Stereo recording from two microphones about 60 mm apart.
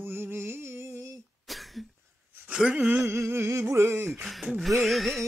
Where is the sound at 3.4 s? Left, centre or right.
Right.